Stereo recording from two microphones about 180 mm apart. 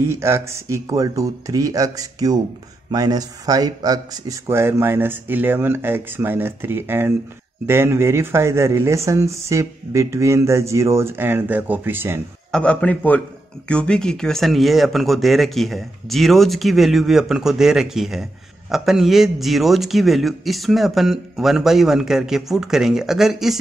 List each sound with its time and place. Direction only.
0.0 s speech: 15° right (ahead or behind)
12.4 s a man's voice: 5° left (ahead or behind)